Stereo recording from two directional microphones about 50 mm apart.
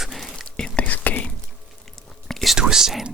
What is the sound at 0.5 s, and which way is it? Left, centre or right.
Whispering, centre.